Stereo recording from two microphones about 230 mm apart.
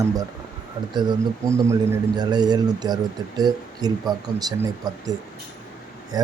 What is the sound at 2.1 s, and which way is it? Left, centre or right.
Speech, centre.